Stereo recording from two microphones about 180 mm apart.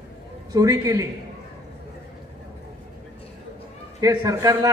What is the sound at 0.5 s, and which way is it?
Speech, 20° right (ahead or behind).